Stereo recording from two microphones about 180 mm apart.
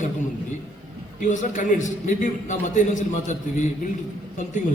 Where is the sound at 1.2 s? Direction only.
45° left (ahead or behind).